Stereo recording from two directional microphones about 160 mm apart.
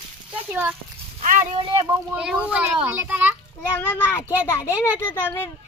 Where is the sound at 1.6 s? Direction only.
30° right (ahead or behind).